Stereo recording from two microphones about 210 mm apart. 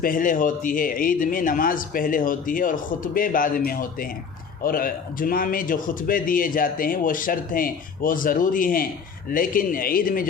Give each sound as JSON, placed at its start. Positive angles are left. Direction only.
{"t": 0.0, "sound": "a man's voice", "side_deg": 40}